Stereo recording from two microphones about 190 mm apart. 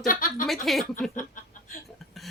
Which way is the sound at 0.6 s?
Centre (ahead or behind).